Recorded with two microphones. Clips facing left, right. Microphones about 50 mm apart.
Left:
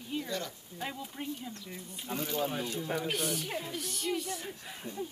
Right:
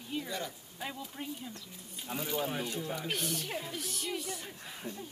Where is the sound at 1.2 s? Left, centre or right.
Centre.